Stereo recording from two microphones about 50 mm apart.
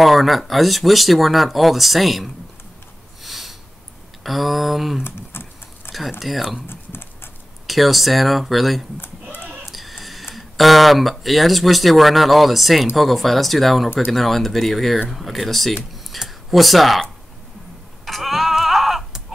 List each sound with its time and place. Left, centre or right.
0.0 s speech: centre
3.3 s a sound: centre
4.2 s speech: centre
5.0 s speech: left
5.9 s speech: centre
6.7 s typing: left
7.6 s speech: centre
9.7 s a sound: centre
10.3 s speech: centre
18.0 s a sound: centre